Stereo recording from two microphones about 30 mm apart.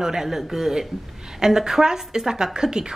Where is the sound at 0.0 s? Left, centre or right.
Centre.